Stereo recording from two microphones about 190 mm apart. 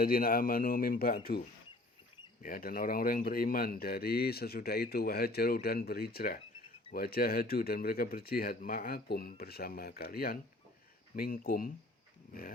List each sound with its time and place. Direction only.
0.0 s speech: 50° left (ahead or behind)
2.4 s speech: 50° left (ahead or behind)